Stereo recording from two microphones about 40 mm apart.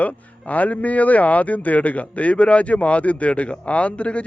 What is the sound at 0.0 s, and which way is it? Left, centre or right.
Speech, left.